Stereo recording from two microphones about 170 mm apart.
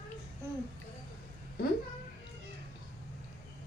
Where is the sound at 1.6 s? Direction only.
65° left (ahead or behind).